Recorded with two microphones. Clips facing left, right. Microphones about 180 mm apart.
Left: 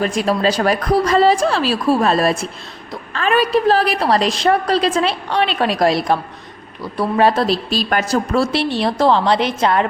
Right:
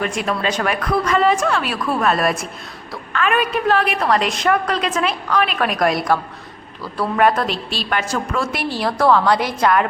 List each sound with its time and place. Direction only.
0.0 s a woman's voice: 35° left (ahead or behind)
7.2 s a woman's voice: 30° left (ahead or behind)
8.7 s a woman's voice: 25° left (ahead or behind)